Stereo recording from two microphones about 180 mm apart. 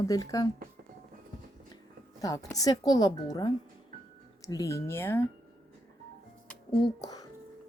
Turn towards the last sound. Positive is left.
turn(degrees=20)  # may be behind; listen again after turning